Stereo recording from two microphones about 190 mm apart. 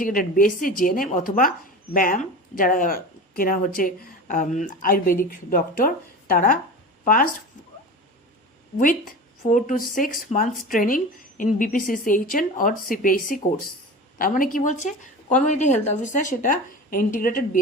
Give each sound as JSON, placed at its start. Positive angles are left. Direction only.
{"t": 0.0, "sound": "speech", "side_deg": 45}
{"t": 9.4, "sound": "speech", "side_deg": 40}